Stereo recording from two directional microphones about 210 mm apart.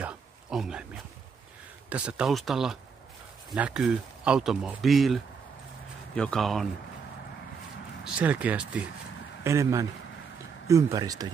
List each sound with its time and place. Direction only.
0.0 s a sound: 5° right (ahead or behind)
1.9 s speech: 5° right (ahead or behind)
8.0 s speech: 5° right (ahead or behind)